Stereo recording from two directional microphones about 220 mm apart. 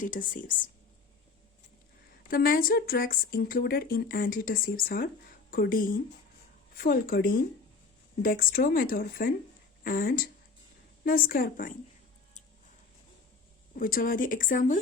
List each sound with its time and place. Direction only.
0.0 s speech: 35° left (ahead or behind)
2.3 s speech: 40° left (ahead or behind)
13.7 s speech: 40° left (ahead or behind)